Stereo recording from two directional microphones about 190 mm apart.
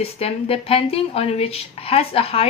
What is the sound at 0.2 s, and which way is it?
A woman's voice, 30° left (ahead or behind).